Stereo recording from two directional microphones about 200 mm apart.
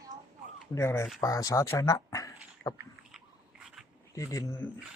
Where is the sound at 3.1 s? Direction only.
5° right (ahead or behind).